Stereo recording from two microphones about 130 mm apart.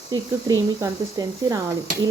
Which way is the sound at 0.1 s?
30° right (ahead or behind).